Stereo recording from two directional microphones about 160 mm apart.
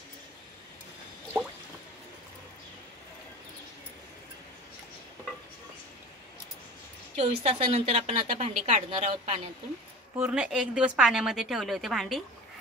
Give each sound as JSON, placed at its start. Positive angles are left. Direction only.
{"t": 7.2, "sound": "a woman's voice", "side_deg": -45}
{"t": 10.1, "sound": "a woman's voice", "side_deg": -10}